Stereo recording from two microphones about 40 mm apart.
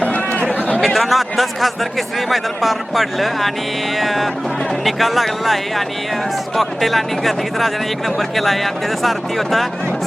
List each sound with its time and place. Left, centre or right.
0.0 s chatter: left
0.8 s speech: centre